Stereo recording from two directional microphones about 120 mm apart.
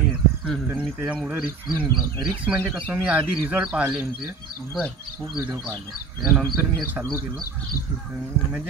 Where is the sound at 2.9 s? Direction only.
15° right (ahead or behind).